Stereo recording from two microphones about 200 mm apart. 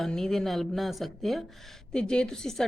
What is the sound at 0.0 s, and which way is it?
A woman's voice, centre (ahead or behind).